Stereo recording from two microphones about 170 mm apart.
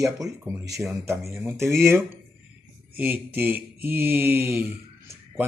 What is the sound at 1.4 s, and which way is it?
Speech, 15° right (ahead or behind).